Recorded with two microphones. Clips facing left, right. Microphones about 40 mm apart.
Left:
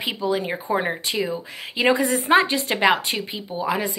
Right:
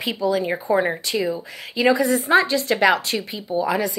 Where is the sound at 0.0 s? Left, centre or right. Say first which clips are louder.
Right 2 dB; centre.